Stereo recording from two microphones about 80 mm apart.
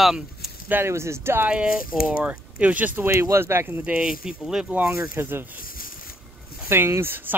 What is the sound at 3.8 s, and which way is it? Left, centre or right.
Speech, centre.